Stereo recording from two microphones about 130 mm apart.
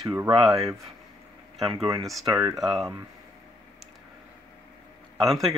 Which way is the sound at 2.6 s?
Centre (ahead or behind).